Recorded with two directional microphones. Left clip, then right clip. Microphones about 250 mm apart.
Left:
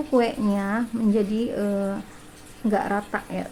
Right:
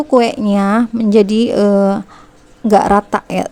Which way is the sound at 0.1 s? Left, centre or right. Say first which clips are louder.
Right 10 dB; right.